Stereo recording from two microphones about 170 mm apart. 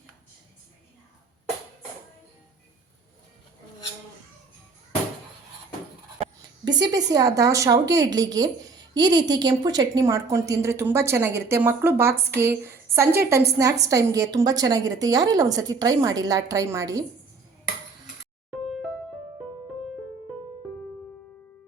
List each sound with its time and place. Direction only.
6.7 s a woman's voice: 25° right (ahead or behind)